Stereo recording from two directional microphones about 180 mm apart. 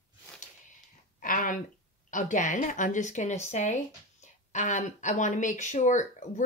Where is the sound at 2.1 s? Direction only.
45° left (ahead or behind).